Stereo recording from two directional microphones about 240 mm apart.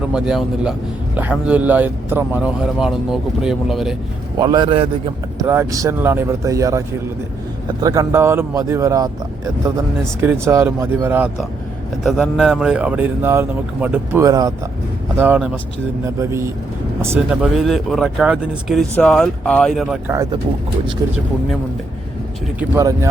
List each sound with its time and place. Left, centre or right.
0.1 s a man's voice: centre
4.4 s a man's voice: centre
22.7 s speech: centre